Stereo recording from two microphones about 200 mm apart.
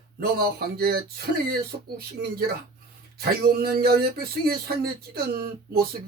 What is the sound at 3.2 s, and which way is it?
Speech, 50° right (ahead or behind).